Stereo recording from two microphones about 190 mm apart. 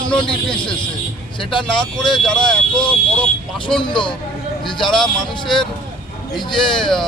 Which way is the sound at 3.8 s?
25° left (ahead or behind).